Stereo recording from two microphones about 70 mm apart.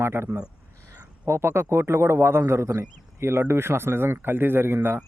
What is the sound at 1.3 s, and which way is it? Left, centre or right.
A man's voice, right.